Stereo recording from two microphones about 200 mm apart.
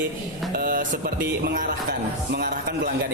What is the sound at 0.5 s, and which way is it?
Music, 45° right (ahead or behind).